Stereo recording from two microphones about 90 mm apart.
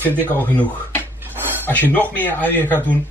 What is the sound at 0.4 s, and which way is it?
Speech, 20° left (ahead or behind).